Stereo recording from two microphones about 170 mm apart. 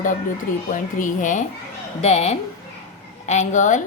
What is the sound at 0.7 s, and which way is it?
A woman's voice, 50° left (ahead or behind).